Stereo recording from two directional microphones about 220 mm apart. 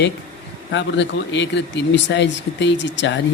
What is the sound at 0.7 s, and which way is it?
Speech, 55° left (ahead or behind).